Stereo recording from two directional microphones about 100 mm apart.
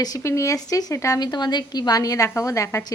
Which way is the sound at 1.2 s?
45° left (ahead or behind).